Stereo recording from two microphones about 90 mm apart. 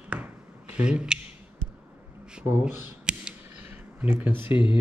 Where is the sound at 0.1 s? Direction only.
15° right (ahead or behind).